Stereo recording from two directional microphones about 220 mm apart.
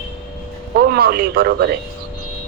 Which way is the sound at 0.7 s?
45° right (ahead or behind).